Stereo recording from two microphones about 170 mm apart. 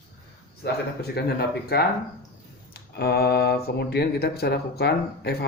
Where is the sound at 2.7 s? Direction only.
70° left (ahead or behind).